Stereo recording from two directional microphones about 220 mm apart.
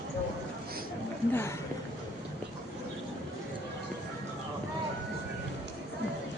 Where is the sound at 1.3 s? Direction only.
10° left (ahead or behind).